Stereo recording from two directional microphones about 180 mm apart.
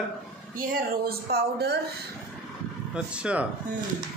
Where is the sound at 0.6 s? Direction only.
55° right (ahead or behind).